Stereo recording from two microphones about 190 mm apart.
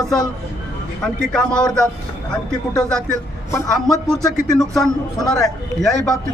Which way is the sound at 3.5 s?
20° left (ahead or behind).